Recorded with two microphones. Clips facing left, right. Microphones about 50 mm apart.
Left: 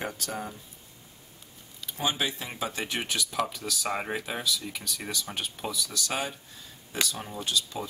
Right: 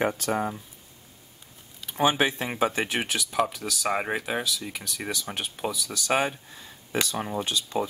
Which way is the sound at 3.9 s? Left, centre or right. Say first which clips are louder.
Right 6 dB; centre.